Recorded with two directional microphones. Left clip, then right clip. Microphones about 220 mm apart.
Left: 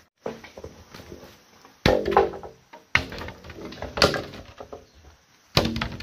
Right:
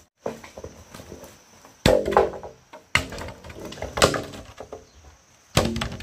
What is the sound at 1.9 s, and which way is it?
Music, 10° left (ahead or behind).